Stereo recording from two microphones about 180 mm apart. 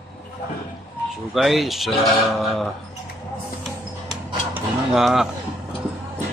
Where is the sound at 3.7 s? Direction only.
Centre (ahead or behind).